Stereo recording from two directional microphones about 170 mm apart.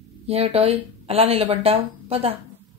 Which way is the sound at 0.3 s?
35° right (ahead or behind).